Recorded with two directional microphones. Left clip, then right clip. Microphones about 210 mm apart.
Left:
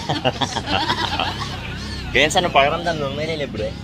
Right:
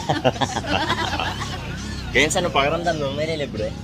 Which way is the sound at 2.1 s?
15° left (ahead or behind).